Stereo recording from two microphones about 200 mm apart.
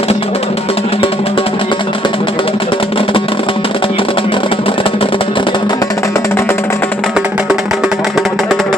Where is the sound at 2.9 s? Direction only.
25° left (ahead or behind).